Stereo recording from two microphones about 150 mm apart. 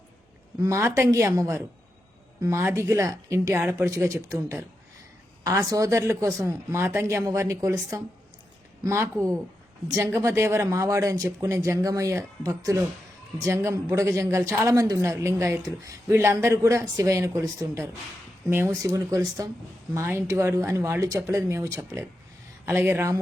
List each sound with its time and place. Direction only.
0.6 s a woman's voice: 20° right (ahead or behind)
5.4 s a woman's voice: 25° right (ahead or behind)